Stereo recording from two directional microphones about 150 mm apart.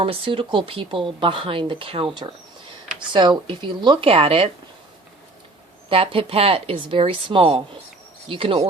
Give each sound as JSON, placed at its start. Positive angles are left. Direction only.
{"t": 0.0, "sound": "speech", "side_deg": -35}
{"t": 5.9, "sound": "speech", "side_deg": -40}